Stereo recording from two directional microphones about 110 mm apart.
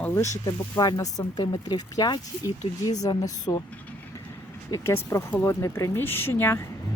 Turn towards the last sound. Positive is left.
turn(degrees=25)  # may be behind; listen again after turning